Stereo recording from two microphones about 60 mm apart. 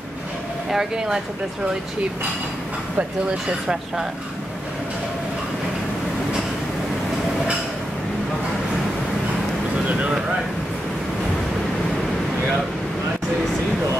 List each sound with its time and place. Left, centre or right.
0.7 s speech: centre
9.8 s speech: right